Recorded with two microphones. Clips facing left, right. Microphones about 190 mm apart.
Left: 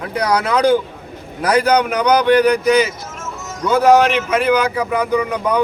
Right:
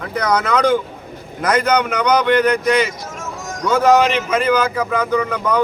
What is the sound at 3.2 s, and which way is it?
Music, 10° right (ahead or behind).